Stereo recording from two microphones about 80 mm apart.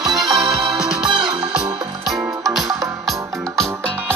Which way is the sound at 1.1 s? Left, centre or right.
Right.